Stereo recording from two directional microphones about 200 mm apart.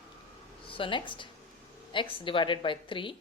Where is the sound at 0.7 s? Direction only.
25° left (ahead or behind).